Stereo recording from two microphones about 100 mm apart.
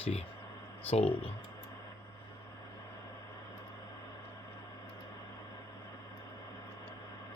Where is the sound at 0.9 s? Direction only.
85° left.